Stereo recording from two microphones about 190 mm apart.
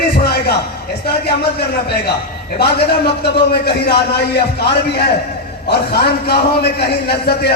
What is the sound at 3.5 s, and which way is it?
A man's voice, 60° left (ahead or behind).